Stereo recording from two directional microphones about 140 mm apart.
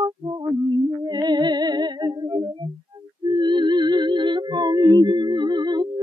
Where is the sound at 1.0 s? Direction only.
30° right (ahead or behind).